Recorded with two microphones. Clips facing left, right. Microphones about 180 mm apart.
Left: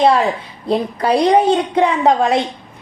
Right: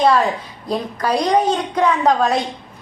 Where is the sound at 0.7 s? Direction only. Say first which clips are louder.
Left 4 dB; 30° left (ahead or behind).